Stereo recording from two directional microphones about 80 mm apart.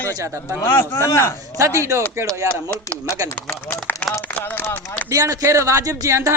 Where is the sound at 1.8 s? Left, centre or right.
Right.